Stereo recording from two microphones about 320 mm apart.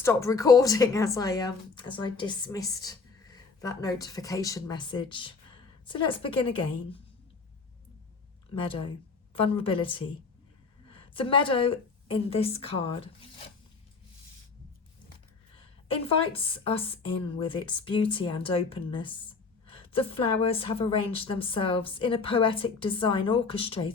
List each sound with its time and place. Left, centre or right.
0.0 s a woman's voice: centre
8.6 s a woman's voice: centre
15.9 s a woman's voice: centre